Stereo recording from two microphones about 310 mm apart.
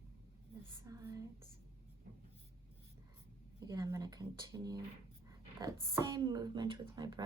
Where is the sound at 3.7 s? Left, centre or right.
Centre.